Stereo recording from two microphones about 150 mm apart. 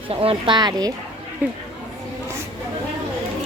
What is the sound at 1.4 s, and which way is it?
Speech, 10° right (ahead or behind).